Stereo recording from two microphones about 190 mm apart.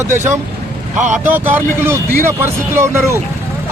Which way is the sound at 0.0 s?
15° right (ahead or behind).